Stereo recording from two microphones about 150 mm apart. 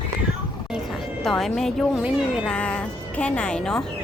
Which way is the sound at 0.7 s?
Centre (ahead or behind).